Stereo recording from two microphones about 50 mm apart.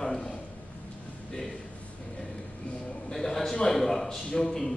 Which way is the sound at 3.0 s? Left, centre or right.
Centre.